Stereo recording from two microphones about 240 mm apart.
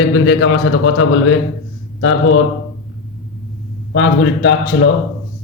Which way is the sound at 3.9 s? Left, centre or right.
Left.